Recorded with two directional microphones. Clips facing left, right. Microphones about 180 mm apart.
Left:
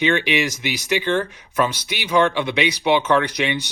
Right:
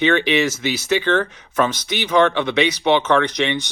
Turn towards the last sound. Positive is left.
turn(degrees=10)  # may be behind; listen again after turning